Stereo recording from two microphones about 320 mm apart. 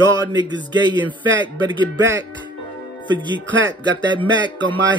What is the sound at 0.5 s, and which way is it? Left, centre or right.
Speech, centre.